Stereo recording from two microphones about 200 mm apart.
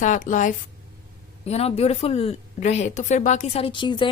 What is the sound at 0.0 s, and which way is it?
Speech, 40° left (ahead or behind).